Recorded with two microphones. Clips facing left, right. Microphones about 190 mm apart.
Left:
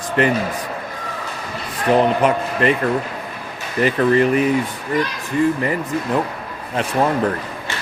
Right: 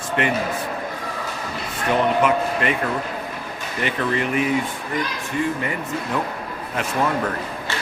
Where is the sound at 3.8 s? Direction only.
35° left (ahead or behind).